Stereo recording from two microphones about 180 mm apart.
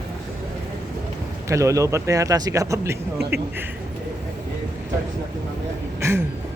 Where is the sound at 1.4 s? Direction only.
15° right (ahead or behind).